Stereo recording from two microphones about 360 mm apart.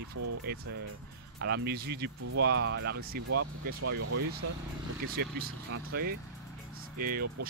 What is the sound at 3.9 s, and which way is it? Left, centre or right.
Speech, right.